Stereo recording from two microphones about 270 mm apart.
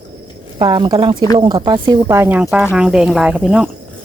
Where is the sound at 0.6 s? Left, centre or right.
Centre.